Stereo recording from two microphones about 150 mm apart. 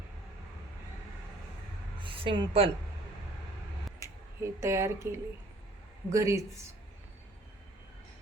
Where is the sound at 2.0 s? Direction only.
35° right (ahead or behind).